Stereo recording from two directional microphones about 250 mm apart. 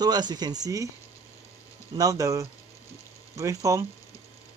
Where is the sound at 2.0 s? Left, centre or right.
Centre.